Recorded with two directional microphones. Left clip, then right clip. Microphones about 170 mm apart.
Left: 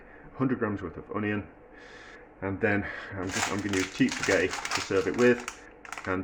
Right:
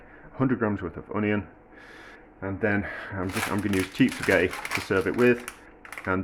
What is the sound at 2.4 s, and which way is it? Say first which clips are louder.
Speech: right 1 dB; 20° right (ahead or behind).